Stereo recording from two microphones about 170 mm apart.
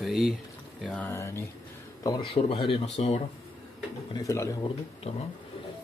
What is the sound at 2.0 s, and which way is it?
Speech, 30° left (ahead or behind).